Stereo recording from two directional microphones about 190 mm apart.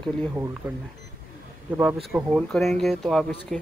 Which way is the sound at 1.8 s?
5° right (ahead or behind).